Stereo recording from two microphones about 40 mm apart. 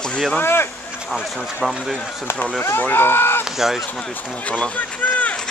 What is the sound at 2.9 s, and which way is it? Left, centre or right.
Speech, left.